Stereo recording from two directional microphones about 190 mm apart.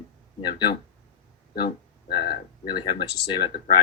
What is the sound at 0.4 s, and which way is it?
Speech, 25° left (ahead or behind).